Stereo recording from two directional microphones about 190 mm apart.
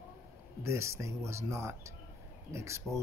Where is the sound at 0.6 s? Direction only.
15° right (ahead or behind).